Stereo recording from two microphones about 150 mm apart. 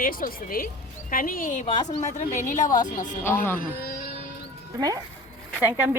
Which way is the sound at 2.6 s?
25° left (ahead or behind).